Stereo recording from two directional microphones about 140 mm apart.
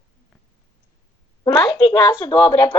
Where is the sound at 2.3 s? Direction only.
15° left (ahead or behind).